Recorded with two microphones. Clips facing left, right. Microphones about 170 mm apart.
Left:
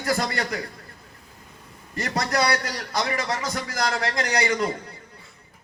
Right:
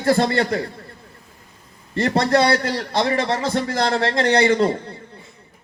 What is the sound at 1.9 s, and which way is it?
A man's voice, 30° right (ahead or behind).